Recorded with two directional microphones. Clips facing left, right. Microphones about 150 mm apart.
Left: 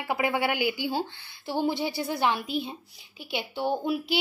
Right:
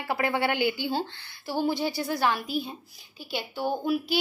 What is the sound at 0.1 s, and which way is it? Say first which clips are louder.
Speech: even; 10° left (ahead or behind).